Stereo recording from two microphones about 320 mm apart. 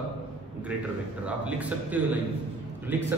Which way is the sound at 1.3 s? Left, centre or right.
Centre.